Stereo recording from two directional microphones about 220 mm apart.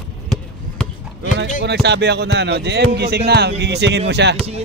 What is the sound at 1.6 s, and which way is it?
Speech, 50° right (ahead or behind).